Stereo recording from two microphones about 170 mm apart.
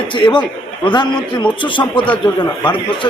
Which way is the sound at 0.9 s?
25° left (ahead or behind).